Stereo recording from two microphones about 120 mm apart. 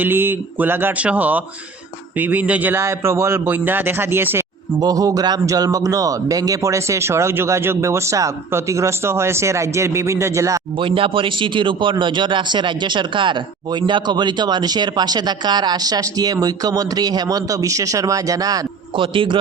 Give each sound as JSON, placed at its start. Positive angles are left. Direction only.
{"t": 0.0, "sound": "a man's voice", "side_deg": -20}
{"t": 4.8, "sound": "a man's voice", "side_deg": -30}
{"t": 10.8, "sound": "a man's voice", "side_deg": -50}
{"t": 18.9, "sound": "a man's voice", "side_deg": -45}